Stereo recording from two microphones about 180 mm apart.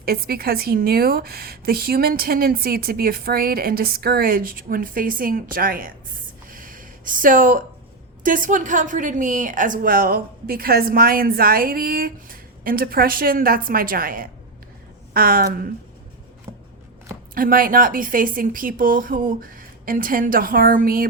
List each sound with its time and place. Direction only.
0.0 s a woman's voice: 55° right (ahead or behind)
6.5 s a sound: 50° right (ahead or behind)
8.2 s a woman's voice: 50° right (ahead or behind)
16.5 s shuffling cards: 15° right (ahead or behind)
17.3 s a woman's voice: 50° right (ahead or behind)